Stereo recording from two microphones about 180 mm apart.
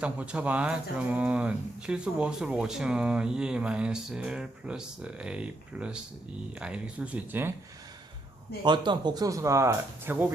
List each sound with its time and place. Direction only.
0.0 s speech: 5° right (ahead or behind)
8.6 s speech: 25° right (ahead or behind)